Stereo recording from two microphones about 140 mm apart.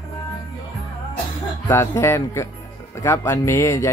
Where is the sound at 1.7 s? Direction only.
20° left (ahead or behind).